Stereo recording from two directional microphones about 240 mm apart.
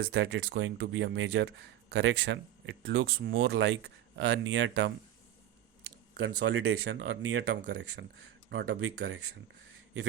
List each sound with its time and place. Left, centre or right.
0.1 s speech: right